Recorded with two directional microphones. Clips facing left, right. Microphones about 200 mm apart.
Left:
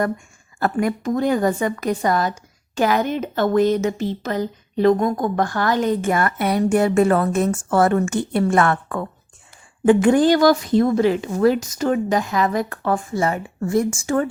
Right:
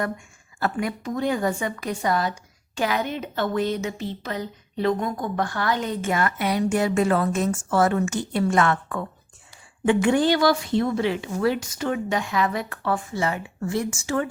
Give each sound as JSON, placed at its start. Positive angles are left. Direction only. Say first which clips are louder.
{"t": 0.6, "sound": "speech", "louder": "left 6 dB", "side_deg": 45}